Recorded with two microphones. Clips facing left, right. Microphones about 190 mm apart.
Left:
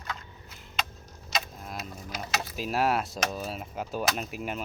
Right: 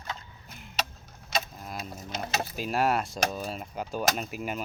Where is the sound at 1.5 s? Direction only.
Centre (ahead or behind).